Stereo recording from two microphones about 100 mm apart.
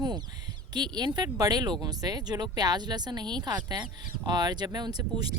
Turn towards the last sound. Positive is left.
turn(degrees=-45)  # may be behind; listen again after turning